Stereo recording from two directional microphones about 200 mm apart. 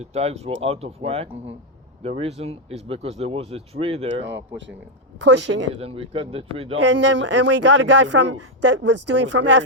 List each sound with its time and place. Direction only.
0.0 s speech: 30° right (ahead or behind)
4.1 s speech: 65° right (ahead or behind)
5.8 s speech: 30° right (ahead or behind)
6.7 s speech: 65° right (ahead or behind)